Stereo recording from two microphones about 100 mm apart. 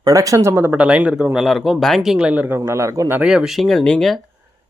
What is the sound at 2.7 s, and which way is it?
Speech, 30° right (ahead or behind).